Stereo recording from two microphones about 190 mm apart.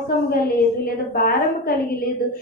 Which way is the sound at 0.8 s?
50° left (ahead or behind).